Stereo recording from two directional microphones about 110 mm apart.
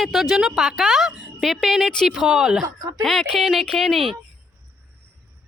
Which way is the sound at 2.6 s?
35° right (ahead or behind).